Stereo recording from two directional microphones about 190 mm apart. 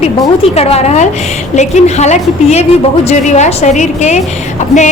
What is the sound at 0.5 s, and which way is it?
A woman's voice, 35° left (ahead or behind).